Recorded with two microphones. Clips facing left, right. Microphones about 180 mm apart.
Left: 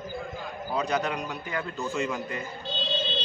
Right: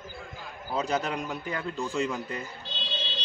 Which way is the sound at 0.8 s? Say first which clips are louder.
Even; 30° right (ahead or behind).